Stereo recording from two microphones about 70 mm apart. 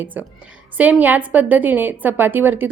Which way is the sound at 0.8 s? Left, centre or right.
Right.